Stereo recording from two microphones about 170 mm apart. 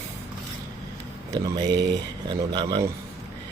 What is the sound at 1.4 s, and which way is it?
Speech, 25° right (ahead or behind).